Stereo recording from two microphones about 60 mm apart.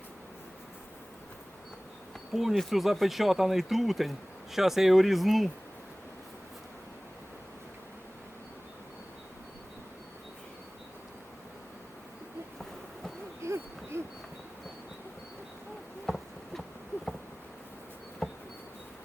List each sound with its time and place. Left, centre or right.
2.3 s speech: centre
13.4 s a sound: right
16.0 s insect: centre
18.2 s bee: centre